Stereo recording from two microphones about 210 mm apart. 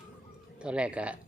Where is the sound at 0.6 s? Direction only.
5° right (ahead or behind).